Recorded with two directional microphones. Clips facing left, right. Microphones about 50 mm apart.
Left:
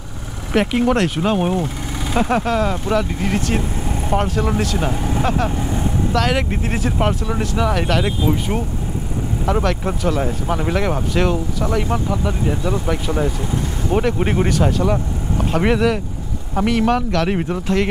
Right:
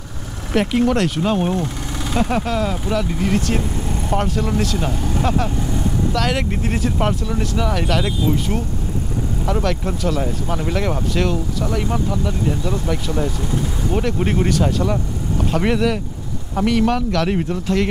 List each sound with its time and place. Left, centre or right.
0.5 s speech: centre